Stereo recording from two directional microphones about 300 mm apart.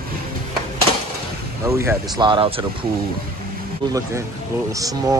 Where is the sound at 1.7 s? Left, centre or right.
Centre.